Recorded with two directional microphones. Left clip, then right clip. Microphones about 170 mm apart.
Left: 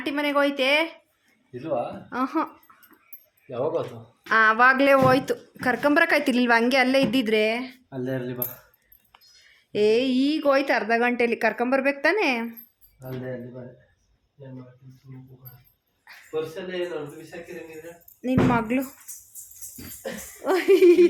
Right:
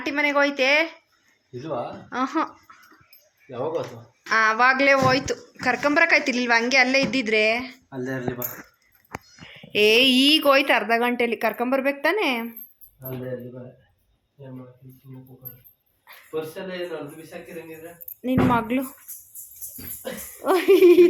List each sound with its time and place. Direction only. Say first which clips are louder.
0.0 s speech: right 2 dB; 5° left (ahead or behind)
4.3 s a woman's voice: left 1 dB; 20° left (ahead or behind)
7.9 s speech: left 2 dB; 45° left (ahead or behind)
9.7 s a woman's voice: right 4 dB; 15° left (ahead or behind)
16.1 s a sound: even; 5° left (ahead or behind)
18.2 s a woman's voice: right 1 dB; centre (ahead or behind)
20.4 s speech: right 2 dB; 15° right (ahead or behind)